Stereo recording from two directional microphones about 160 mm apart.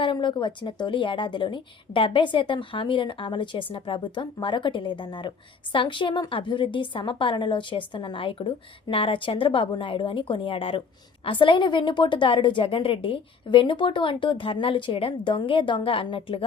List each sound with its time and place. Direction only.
0.0 s a woman's voice: 30° left (ahead or behind)